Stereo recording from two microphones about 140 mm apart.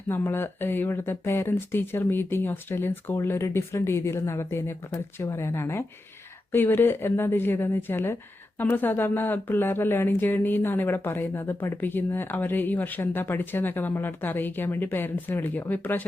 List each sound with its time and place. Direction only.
0.1 s speech: 15° left (ahead or behind)